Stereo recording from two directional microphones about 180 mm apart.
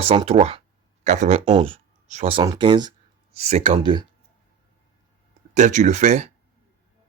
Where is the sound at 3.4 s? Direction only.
35° right (ahead or behind).